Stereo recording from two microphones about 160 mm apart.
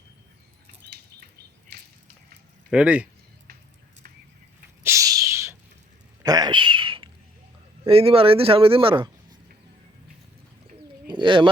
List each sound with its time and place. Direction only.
2.6 s speech: 5° right (ahead or behind)
4.8 s a sound: 20° right (ahead or behind)
7.9 s speech: 35° right (ahead or behind)
11.1 s bird: 30° right (ahead or behind)